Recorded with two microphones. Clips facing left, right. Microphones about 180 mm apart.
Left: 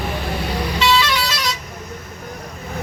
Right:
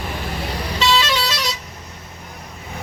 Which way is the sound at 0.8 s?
35° right (ahead or behind).